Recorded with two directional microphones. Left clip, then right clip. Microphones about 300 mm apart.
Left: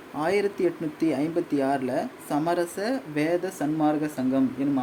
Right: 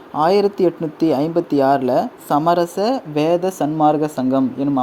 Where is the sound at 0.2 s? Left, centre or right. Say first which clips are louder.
Right 10 dB; centre.